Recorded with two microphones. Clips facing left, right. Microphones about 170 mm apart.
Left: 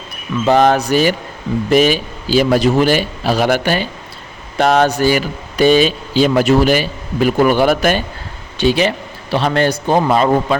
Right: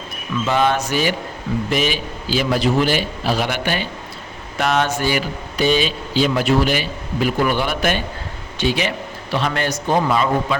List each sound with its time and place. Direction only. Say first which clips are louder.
0.4 s a man's voice: left 7 dB; 40° left (ahead or behind)